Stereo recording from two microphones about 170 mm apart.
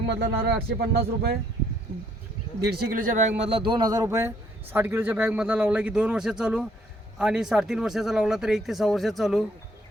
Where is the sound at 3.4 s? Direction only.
30° right (ahead or behind).